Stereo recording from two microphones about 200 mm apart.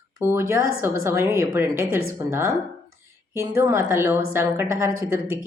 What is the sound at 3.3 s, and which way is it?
A woman's voice, 15° right (ahead or behind).